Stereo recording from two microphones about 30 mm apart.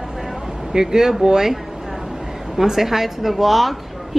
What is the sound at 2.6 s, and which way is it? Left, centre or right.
Speech, centre.